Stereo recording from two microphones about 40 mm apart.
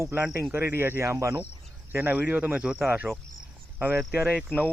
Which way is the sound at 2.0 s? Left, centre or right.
Right.